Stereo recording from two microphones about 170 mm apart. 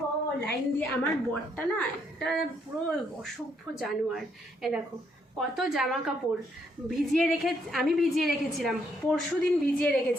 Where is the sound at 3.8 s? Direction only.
Centre (ahead or behind).